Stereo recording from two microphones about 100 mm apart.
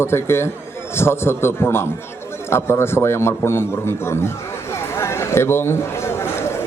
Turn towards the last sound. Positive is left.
turn(degrees=25)  # may be behind; listen again after turning